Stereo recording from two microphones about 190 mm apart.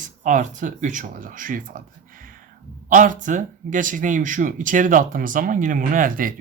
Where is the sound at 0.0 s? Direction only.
40° right (ahead or behind).